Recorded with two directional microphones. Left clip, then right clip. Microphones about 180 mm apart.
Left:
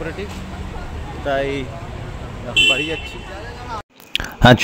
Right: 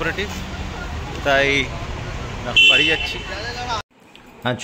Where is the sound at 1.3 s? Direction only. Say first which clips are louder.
Right 4 dB; 10° left (ahead or behind).